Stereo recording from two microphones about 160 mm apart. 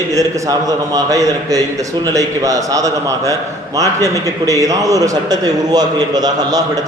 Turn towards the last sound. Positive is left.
turn(degrees=-25)  # may be behind; listen again after turning